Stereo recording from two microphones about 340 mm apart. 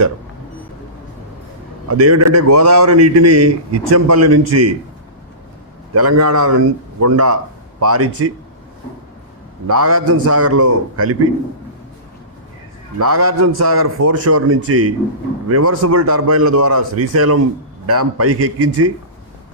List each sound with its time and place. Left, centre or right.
1.9 s a man's voice: right
5.9 s a man's voice: right
9.6 s a man's voice: right
13.0 s a man's voice: right